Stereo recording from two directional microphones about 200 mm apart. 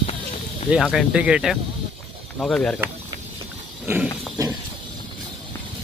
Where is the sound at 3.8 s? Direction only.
10° right (ahead or behind).